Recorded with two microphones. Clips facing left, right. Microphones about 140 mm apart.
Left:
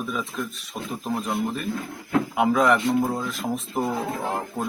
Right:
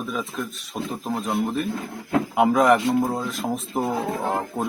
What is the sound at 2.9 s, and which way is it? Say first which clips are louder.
Speech: right 1 dB; 15° right (ahead or behind).